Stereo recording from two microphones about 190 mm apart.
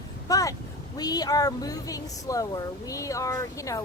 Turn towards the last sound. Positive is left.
turn(degrees=15)  # may be behind; listen again after turning